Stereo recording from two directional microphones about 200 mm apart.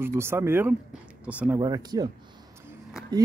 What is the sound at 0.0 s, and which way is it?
Speech, 10° right (ahead or behind).